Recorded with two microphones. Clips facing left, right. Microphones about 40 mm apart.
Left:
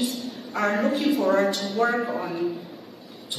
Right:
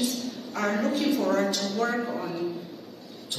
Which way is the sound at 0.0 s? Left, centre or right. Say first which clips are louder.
Left 1 dB; centre.